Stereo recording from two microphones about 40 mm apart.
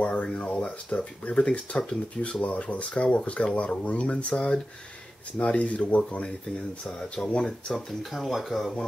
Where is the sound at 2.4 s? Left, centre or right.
Left.